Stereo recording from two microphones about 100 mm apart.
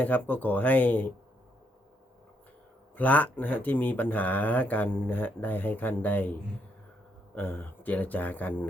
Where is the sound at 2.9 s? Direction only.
15° left (ahead or behind).